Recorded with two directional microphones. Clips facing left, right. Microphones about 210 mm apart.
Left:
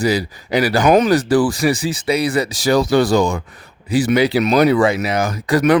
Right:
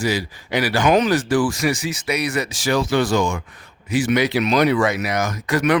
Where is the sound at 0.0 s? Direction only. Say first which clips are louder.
Left 4 dB; 35° left (ahead or behind).